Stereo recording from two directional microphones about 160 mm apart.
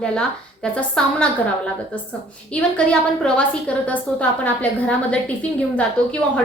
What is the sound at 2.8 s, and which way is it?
A woman's voice, 5° left (ahead or behind).